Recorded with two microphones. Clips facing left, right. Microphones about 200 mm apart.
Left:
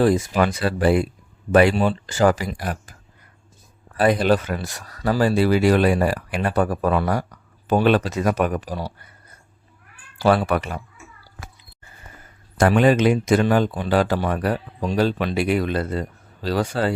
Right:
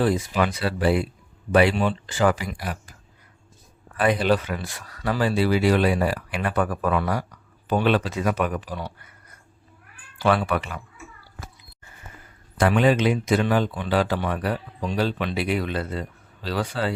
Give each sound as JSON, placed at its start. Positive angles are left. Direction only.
{"t": 0.0, "sound": "speech", "side_deg": 45}
{"t": 3.9, "sound": "speech", "side_deg": 40}
{"t": 12.5, "sound": "speech", "side_deg": 45}